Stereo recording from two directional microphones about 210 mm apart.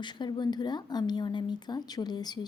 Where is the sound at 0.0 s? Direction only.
20° left (ahead or behind).